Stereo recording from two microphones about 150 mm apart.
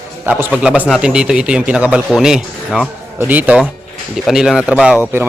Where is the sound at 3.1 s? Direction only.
10° right (ahead or behind).